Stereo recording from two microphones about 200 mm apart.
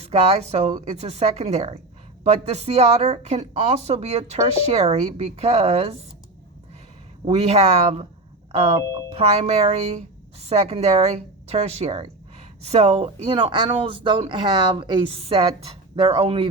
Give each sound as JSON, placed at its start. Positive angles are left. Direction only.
{"t": 0.0, "sound": "a woman's voice", "side_deg": -30}
{"t": 7.3, "sound": "a woman's voice", "side_deg": -30}